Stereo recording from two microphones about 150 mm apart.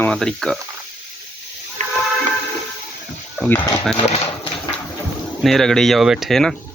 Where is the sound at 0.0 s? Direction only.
5° left (ahead or behind).